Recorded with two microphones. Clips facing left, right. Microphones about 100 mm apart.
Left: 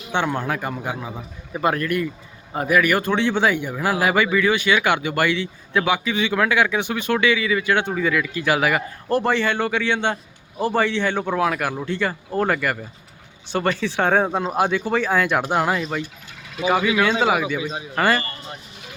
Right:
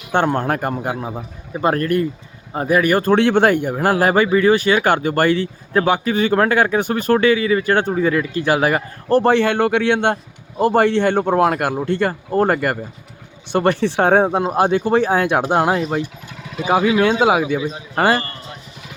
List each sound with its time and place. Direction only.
0.1 s a man's voice: 45° right (ahead or behind)
3.2 s speech: 55° right (ahead or behind); by 9.3 s 35° right (ahead or behind)
9.3 s a man's voice: 60° right (ahead or behind)
13.5 s a man's voice: 60° right (ahead or behind)
17.2 s speech: 25° right (ahead or behind)
17.9 s speech: 40° right (ahead or behind)